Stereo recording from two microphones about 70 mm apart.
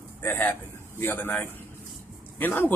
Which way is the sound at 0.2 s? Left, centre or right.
Left.